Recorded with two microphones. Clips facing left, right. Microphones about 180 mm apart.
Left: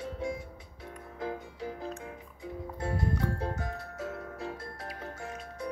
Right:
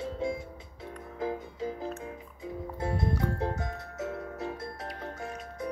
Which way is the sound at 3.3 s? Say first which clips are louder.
Right 2 dB; 20° right (ahead or behind).